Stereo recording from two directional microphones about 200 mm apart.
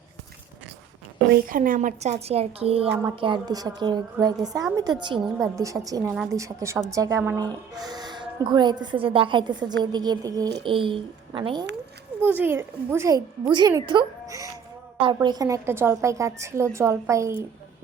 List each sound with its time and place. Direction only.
1.3 s a woman's voice: 45° right (ahead or behind); by 11.6 s 25° right (ahead or behind)
12.2 s a woman's voice: 10° right (ahead or behind)